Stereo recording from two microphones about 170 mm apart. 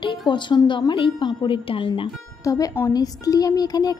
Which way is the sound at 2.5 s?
20° left (ahead or behind).